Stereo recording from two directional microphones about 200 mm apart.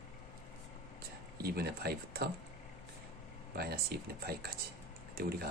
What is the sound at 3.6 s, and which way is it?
Speech, 50° right (ahead or behind).